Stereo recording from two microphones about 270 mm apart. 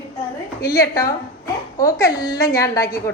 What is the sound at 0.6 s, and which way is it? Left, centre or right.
A woman's voice, centre.